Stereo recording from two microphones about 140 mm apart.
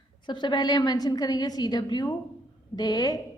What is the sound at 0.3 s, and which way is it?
A woman's voice, 35° left (ahead or behind).